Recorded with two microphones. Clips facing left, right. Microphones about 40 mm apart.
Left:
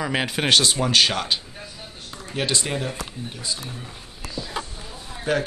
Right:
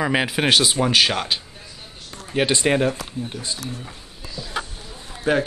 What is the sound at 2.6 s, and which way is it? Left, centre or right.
Speech, right.